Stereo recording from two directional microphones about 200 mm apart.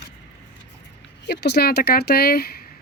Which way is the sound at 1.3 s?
55° left (ahead or behind).